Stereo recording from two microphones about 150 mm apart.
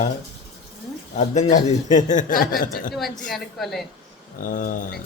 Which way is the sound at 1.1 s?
55° left (ahead or behind).